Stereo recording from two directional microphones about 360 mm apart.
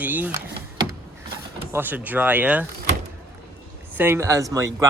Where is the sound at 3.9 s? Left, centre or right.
Centre.